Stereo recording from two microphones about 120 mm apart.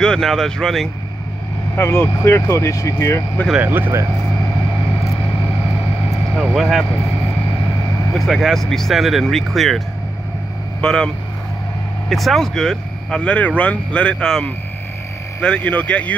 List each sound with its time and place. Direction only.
0.0 s speech: 5° left (ahead or behind)
1.8 s speech: 20° left (ahead or behind)
3.5 s speech: 15° right (ahead or behind)
6.3 s speech: centre (ahead or behind)
8.1 s speech: centre (ahead or behind)
10.8 s speech: 5° left (ahead or behind)
12.1 s speech: centre (ahead or behind)